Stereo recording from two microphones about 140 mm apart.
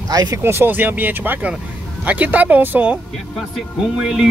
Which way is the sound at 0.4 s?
15° right (ahead or behind).